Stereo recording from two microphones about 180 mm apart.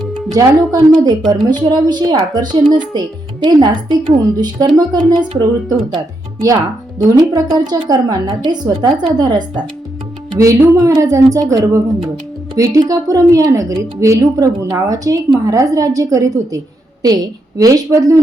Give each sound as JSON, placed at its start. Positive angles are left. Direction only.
{"t": 0.3, "sound": "a woman's voice", "side_deg": -20}
{"t": 7.2, "sound": "a woman's voice", "side_deg": -25}
{"t": 17.6, "sound": "a woman's voice", "side_deg": -20}